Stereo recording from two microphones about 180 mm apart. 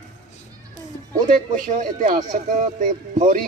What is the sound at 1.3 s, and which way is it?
Speech, 45° right (ahead or behind).